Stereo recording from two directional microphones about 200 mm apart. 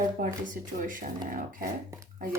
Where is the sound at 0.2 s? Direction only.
40° right (ahead or behind).